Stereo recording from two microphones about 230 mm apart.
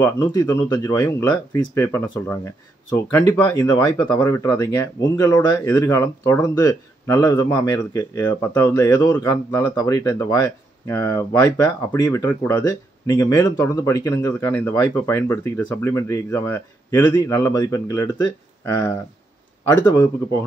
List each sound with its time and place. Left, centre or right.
0.0 s speech: centre